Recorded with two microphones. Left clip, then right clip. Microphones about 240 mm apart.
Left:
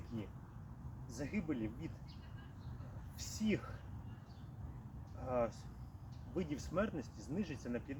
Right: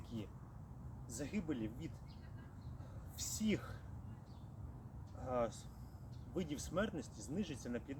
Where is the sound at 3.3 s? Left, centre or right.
Centre.